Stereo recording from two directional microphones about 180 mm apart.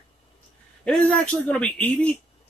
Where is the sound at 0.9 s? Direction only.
5° left (ahead or behind).